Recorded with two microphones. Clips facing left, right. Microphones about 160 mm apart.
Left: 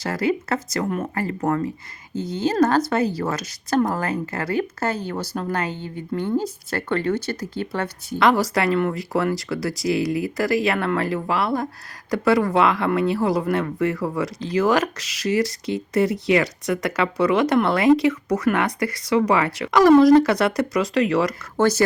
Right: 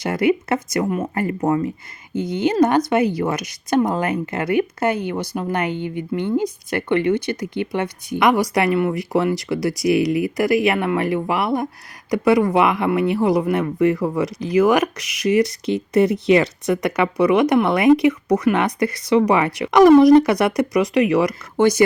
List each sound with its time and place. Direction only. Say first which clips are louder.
0.0 s speech: right 4 dB; 20° right (ahead or behind)